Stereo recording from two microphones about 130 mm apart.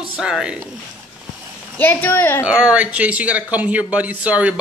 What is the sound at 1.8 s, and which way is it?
Speech, 15° left (ahead or behind).